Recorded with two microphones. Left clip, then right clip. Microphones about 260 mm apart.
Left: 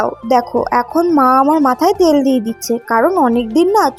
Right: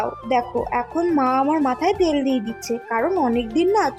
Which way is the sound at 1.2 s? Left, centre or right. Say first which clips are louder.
Left 9 dB; centre.